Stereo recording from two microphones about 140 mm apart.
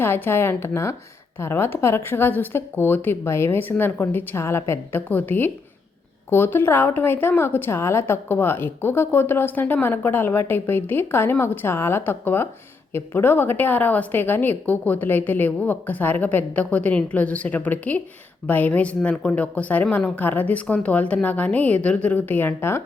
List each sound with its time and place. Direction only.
0.0 s a woman's voice: 15° left (ahead or behind)